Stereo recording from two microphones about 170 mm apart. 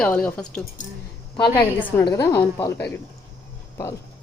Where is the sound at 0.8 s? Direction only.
50° left (ahead or behind).